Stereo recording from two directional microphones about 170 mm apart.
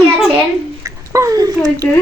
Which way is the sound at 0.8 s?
20° right (ahead or behind).